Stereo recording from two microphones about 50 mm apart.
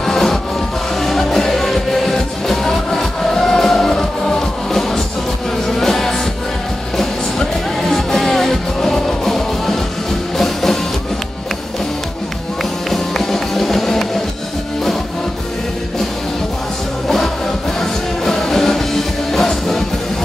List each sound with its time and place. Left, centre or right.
0.0 s music: centre
12.9 s music: centre
17.7 s music: centre